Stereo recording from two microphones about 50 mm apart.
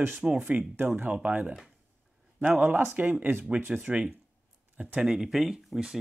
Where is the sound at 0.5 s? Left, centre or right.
Right.